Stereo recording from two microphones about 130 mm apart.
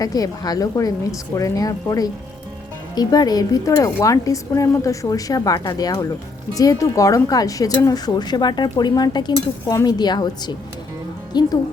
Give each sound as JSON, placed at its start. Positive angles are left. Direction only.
{"t": 0.0, "sound": "speech", "side_deg": 30}